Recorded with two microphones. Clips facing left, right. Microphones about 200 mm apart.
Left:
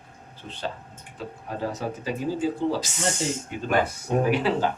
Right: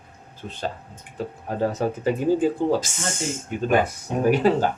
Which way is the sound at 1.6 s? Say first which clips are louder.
Right 7 dB; 50° right (ahead or behind).